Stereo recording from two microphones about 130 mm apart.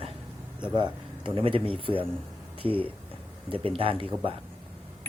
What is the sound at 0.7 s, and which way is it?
Speech, 40° right (ahead or behind).